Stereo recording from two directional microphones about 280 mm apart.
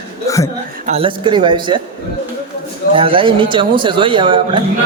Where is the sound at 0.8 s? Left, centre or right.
Centre.